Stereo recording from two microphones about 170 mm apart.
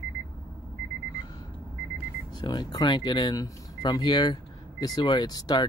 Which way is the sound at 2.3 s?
25° left (ahead or behind).